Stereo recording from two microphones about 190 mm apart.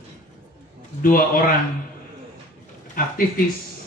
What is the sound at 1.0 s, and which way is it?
Speech, 45° left (ahead or behind).